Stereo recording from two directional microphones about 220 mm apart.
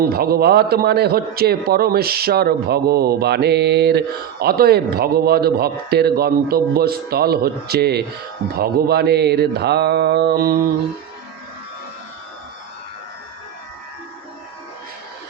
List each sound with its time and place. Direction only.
0.1 s a man's voice: 45° right (ahead or behind)